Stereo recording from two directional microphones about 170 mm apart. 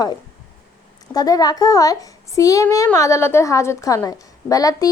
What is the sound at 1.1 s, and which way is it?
A child's voice, 20° left (ahead or behind).